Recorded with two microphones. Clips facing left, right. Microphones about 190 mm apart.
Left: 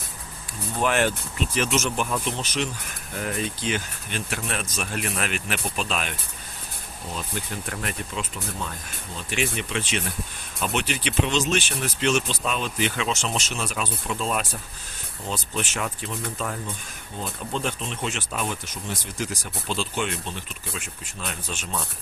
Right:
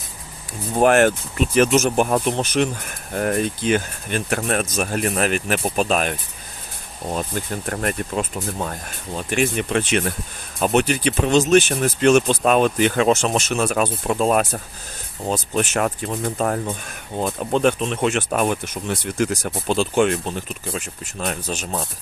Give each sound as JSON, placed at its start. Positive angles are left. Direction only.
{"t": 0.8, "sound": "speech", "side_deg": -50}
{"t": 17.2, "sound": "speech", "side_deg": -60}